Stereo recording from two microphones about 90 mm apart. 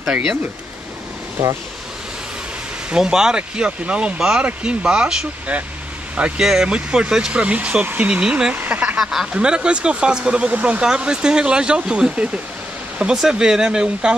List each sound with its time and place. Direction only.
0.0 s speech: 5° right (ahead or behind)
2.9 s speech: 5° right (ahead or behind)
9.0 s speech: 5° right (ahead or behind)